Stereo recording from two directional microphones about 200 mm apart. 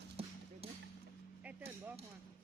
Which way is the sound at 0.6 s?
30° right (ahead or behind).